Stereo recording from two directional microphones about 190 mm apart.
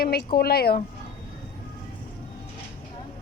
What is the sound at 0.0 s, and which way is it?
Speech, 55° left (ahead or behind).